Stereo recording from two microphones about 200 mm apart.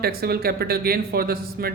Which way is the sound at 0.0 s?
50° right (ahead or behind).